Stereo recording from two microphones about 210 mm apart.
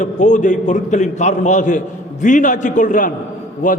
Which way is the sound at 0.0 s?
35° left (ahead or behind).